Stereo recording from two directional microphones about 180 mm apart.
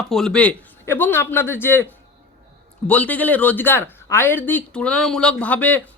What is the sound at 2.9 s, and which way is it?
Speech, 10° left (ahead or behind).